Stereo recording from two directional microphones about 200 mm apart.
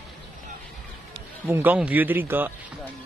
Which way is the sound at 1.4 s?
10° right (ahead or behind).